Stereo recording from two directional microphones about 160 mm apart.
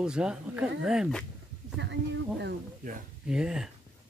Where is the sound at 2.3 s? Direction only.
75° right (ahead or behind).